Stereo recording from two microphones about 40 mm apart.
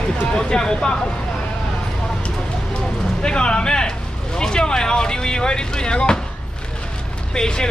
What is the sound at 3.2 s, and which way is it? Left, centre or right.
Speech, left.